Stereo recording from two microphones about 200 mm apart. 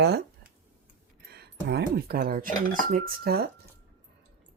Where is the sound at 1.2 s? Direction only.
55° right (ahead or behind).